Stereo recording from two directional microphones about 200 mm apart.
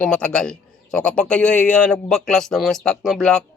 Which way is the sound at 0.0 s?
5° left (ahead or behind).